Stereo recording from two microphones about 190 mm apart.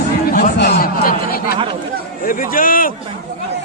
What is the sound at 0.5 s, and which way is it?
A man's voice, 60° left (ahead or behind).